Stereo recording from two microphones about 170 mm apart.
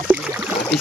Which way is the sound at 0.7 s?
Centre (ahead or behind).